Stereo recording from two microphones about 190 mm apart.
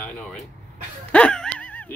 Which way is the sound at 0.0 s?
5° left (ahead or behind).